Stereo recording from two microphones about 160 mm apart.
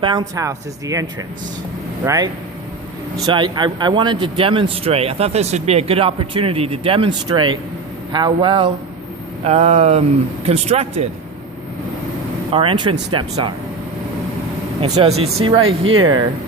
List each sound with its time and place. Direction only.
0.0 s speech: 30° right (ahead or behind)
2.0 s a man's voice: 20° right (ahead or behind); by 11.1 s 40° right (ahead or behind)
12.5 s a man's voice: 35° right (ahead or behind)
14.8 s a man's voice: 40° right (ahead or behind)